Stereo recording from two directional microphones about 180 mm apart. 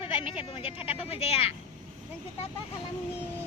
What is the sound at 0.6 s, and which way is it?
Speech, 30° left (ahead or behind).